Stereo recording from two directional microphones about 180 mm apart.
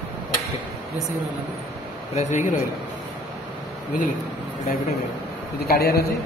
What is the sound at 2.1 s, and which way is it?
Speech, 40° left (ahead or behind).